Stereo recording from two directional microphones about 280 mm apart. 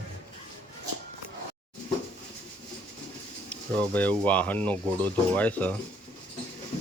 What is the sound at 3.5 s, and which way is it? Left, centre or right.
Speech, centre.